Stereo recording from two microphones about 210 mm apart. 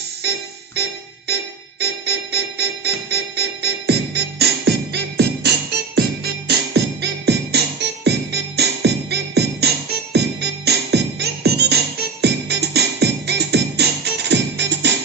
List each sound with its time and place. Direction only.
0.2 s music: 50° right (ahead or behind)